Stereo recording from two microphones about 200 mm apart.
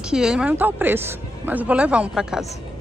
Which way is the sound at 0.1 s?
5° right (ahead or behind).